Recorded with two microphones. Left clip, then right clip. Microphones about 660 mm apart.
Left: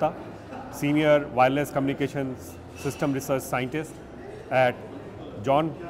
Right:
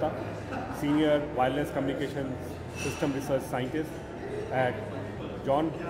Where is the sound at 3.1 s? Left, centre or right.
Left.